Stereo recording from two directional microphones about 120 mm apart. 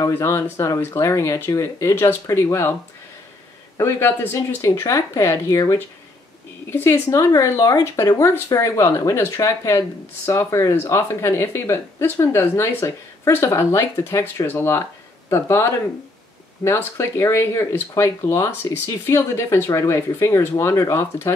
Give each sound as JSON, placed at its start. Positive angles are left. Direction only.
{"t": 0.0, "sound": "speech", "side_deg": 25}
{"t": 3.7, "sound": "speech", "side_deg": 20}